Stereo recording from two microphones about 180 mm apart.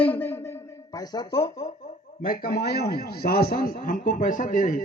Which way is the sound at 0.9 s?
20° left (ahead or behind).